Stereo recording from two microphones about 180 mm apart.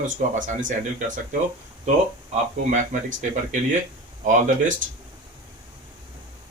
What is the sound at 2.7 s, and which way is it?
Speech, 45° right (ahead or behind).